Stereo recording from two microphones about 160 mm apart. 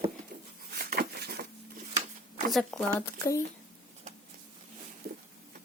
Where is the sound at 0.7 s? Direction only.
70° right (ahead or behind).